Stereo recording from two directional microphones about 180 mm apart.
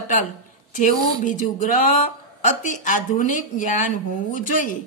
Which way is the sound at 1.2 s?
45° left (ahead or behind).